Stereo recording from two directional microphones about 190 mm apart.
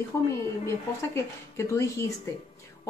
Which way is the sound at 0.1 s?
15° left (ahead or behind).